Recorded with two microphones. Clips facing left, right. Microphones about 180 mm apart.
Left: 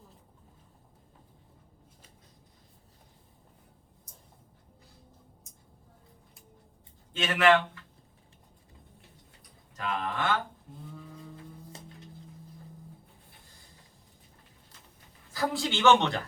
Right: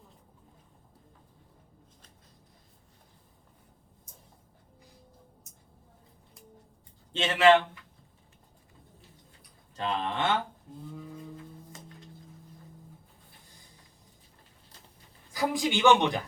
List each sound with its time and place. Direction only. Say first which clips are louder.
7.1 s a man's voice: right 2 dB; 25° right (ahead or behind)
9.7 s speech: right 2 dB; 30° right (ahead or behind)
15.3 s a man's voice: right 2 dB; 15° right (ahead or behind)